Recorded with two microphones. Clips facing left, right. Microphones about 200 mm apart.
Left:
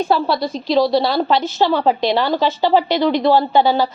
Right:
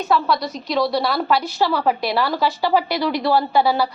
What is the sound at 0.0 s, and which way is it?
A woman's voice, 30° left (ahead or behind).